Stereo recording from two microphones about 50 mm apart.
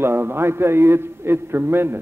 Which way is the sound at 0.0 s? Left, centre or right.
Right.